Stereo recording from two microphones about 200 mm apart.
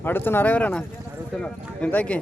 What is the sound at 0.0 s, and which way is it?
Speech, 10° left (ahead or behind).